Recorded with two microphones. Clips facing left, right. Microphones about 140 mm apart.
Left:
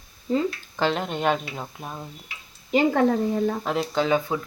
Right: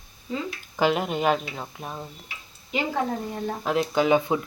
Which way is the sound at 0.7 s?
10° right (ahead or behind).